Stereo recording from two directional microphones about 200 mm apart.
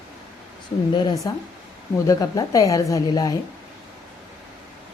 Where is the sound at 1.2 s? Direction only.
20° left (ahead or behind).